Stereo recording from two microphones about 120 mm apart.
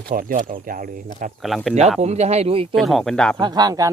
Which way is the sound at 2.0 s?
65° right (ahead or behind).